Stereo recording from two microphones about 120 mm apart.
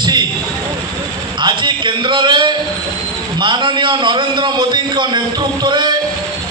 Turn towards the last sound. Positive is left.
turn(degrees=-40)  # may be behind; listen again after turning